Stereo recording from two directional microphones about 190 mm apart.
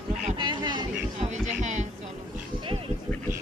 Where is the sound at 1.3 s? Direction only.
40° right (ahead or behind).